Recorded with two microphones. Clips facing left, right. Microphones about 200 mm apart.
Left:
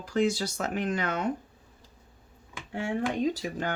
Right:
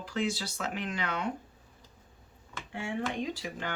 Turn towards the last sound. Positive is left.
turn(degrees=45)  # may be behind; listen again after turning